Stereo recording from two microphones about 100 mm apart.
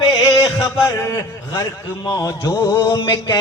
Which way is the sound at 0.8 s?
30° left (ahead or behind).